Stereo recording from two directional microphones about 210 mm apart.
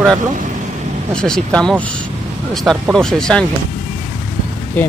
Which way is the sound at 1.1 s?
5° left (ahead or behind).